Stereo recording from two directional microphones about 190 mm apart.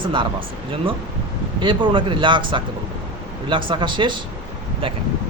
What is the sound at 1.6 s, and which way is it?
A man's voice, 25° right (ahead or behind).